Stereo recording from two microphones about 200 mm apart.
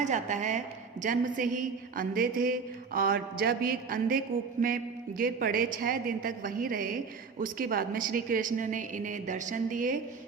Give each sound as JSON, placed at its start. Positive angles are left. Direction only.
{"t": 0.0, "sound": "a woman's voice", "side_deg": -35}